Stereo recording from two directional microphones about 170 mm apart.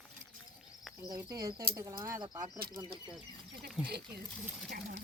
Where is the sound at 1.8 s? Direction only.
20° right (ahead or behind).